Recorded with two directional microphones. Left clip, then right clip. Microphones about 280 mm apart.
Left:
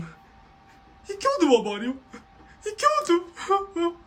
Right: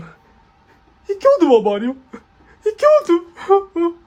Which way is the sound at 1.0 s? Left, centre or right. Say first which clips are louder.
Right 10 dB; centre.